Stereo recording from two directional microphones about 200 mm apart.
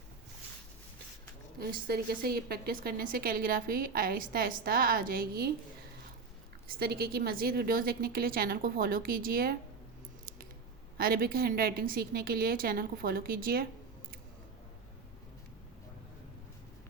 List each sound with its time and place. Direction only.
1.5 s a woman's voice: 50° right (ahead or behind)
6.7 s a woman's voice: 50° right (ahead or behind)
10.9 s a woman's voice: 50° right (ahead or behind)